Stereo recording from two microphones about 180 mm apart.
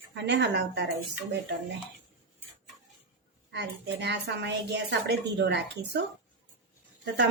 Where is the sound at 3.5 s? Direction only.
70° right (ahead or behind).